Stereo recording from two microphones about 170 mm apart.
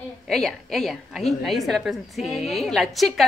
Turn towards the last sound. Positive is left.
turn(degrees=0)  # may be behind; listen again after turning